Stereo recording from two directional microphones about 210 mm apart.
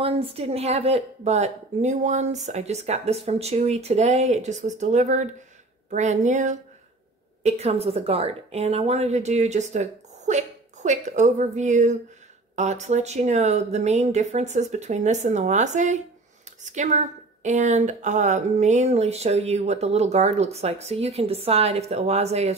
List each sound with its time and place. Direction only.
0.0 s a woman's voice: 25° right (ahead or behind)